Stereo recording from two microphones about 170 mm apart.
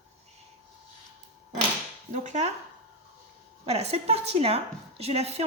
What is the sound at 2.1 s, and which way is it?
Speech, 45° right (ahead or behind).